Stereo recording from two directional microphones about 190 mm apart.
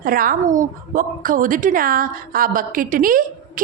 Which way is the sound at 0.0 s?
50° right (ahead or behind).